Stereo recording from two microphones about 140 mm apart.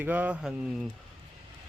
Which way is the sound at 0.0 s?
10° right (ahead or behind).